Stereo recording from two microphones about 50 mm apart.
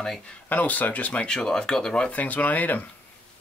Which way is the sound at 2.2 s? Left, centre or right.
Left.